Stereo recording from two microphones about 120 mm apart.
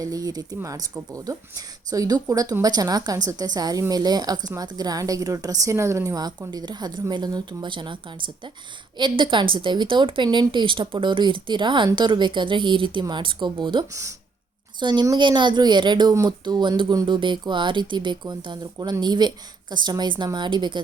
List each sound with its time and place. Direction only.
0.0 s speech: 30° right (ahead or behind)
9.0 s a woman's voice: 40° right (ahead or behind)